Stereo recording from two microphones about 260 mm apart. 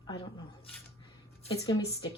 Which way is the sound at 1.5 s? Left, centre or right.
Centre.